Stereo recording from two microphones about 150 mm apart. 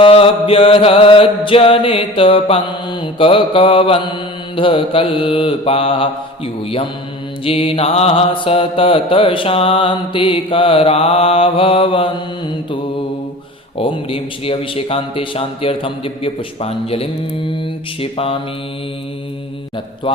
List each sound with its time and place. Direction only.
0.0 s mantra: 35° left (ahead or behind)
13.7 s mantra: 35° left (ahead or behind)
20.1 s a man's voice: 35° left (ahead or behind)